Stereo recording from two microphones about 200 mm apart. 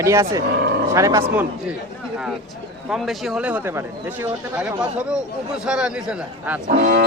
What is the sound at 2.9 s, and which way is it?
Speech, centre (ahead or behind).